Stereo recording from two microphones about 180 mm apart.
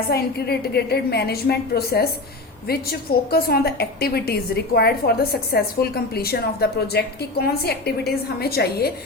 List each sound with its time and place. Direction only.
0.1 s a woman's voice: 60° left (ahead or behind)